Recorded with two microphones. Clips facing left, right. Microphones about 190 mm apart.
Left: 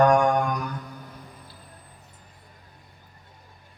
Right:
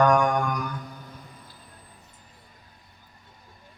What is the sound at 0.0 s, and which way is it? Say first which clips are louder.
Mantra: left 2 dB; 30° left (ahead or behind).